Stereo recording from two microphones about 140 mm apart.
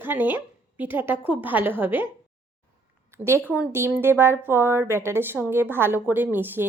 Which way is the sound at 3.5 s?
15° right (ahead or behind).